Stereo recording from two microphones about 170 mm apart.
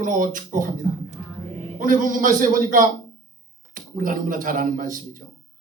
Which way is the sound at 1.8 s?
50° right (ahead or behind).